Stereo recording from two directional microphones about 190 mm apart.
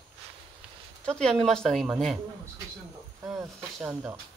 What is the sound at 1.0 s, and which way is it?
Speech, 5° left (ahead or behind).